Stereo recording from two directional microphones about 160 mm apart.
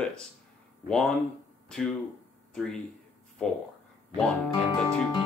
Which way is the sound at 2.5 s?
5° left (ahead or behind).